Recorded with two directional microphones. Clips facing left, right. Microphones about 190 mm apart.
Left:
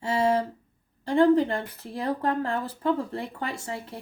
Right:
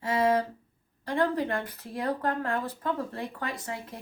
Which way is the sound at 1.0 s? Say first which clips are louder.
Left 7 dB; 25° left (ahead or behind).